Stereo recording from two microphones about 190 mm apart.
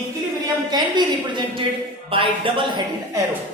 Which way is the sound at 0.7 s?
25° right (ahead or behind).